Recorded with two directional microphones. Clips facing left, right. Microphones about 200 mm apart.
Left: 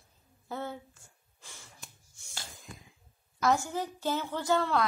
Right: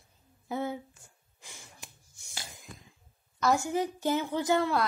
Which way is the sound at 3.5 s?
15° right (ahead or behind).